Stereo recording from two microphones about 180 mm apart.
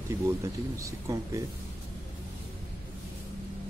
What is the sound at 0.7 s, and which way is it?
Speech, 15° right (ahead or behind).